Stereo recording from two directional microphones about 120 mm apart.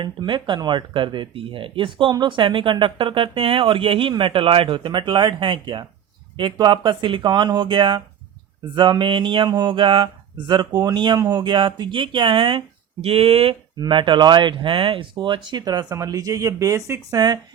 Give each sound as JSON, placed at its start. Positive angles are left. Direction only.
{"t": 0.0, "sound": "speech", "side_deg": -40}
{"t": 13.7, "sound": "speech", "side_deg": -40}